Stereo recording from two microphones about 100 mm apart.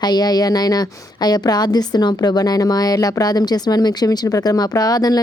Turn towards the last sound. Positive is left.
turn(degrees=40)  # may be behind; listen again after turning